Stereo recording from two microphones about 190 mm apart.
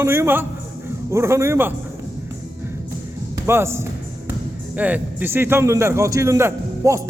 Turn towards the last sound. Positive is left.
turn(degrees=-15)  # may be behind; listen again after turning